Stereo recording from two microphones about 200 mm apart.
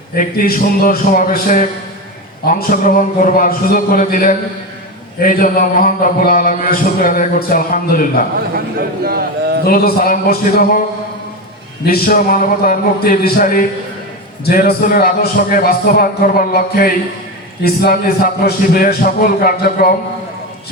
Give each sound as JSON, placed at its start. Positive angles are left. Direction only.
{"t": 0.2, "sound": "a man's voice", "side_deg": 45}
{"t": 8.8, "sound": "a man's voice", "side_deg": -50}
{"t": 9.6, "sound": "a man's voice", "side_deg": 50}
{"t": 11.9, "sound": "a man's voice", "side_deg": 45}